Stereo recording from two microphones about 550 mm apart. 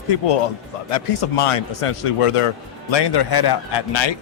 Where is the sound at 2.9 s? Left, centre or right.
Left.